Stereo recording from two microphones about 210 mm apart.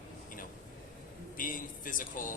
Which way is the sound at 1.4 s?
40° left (ahead or behind).